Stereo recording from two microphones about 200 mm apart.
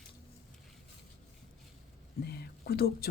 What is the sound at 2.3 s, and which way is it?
Speech, 55° left (ahead or behind).